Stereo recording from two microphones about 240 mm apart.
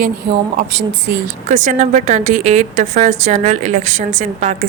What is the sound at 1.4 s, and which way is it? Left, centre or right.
A woman's voice, right.